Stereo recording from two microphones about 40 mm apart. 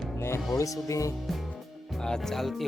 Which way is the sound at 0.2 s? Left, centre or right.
Left.